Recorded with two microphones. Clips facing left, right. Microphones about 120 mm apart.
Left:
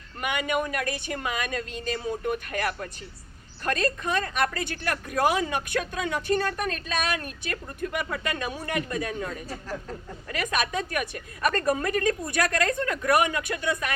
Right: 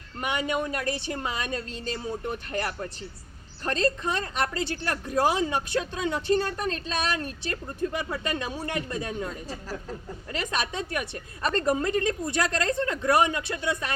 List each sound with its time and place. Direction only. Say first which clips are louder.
0.2 s a woman's voice: left 1 dB; 30° right (ahead or behind)
3.6 s a woman's voice: right 1 dB; 25° right (ahead or behind)